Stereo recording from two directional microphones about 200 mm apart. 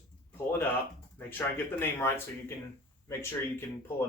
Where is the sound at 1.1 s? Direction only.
10° left (ahead or behind).